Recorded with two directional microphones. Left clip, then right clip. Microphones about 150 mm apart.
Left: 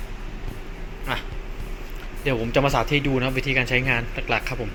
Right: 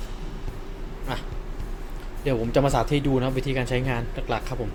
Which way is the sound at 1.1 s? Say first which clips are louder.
Left 5 dB; 10° right (ahead or behind).